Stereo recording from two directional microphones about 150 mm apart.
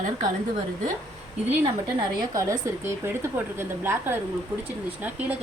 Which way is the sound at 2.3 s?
20° right (ahead or behind).